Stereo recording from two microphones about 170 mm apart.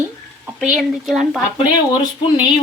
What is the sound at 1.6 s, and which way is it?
Speech, 25° left (ahead or behind).